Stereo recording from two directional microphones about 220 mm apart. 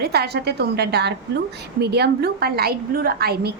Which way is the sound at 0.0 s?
45° right (ahead or behind).